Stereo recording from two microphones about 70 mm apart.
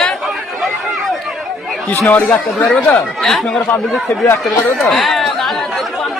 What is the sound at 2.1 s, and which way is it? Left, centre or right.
Speech, left.